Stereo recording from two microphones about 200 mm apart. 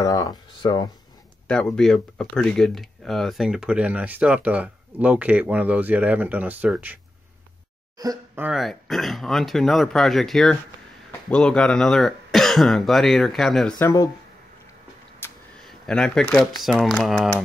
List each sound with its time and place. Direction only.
0.0 s speech: 20° left (ahead or behind)
1.5 s speech: 5° left (ahead or behind)
8.0 s speech: 20° right (ahead or behind)
8.5 s speech: centre (ahead or behind)
13.7 s speech: 20° left (ahead or behind)
15.2 s a sound: 10° left (ahead or behind)
15.6 s speech: 5° left (ahead or behind)